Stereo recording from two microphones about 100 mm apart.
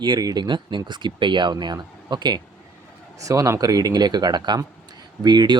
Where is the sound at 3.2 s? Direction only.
35° right (ahead or behind).